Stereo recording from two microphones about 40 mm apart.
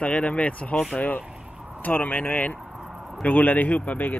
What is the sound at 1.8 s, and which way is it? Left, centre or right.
Speech, left.